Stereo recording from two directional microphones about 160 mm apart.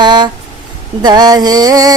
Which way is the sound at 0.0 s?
25° right (ahead or behind).